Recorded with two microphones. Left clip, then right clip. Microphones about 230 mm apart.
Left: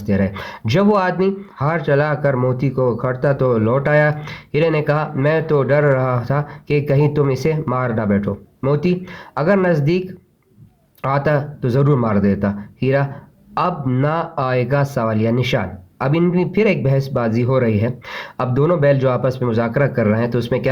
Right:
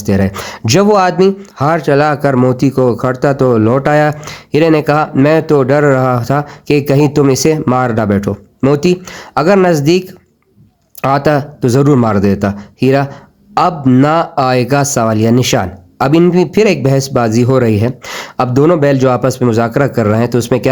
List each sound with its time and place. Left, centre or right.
0.0 s speech: right
11.0 s speech: right